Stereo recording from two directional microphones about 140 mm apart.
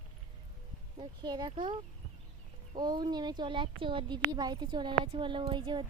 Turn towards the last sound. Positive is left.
turn(degrees=-35)  # may be behind; listen again after turning